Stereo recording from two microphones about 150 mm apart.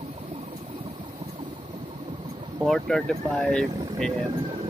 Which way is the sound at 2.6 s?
Centre (ahead or behind).